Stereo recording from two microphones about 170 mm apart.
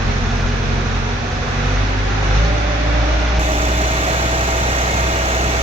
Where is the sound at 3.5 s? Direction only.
35° right (ahead or behind).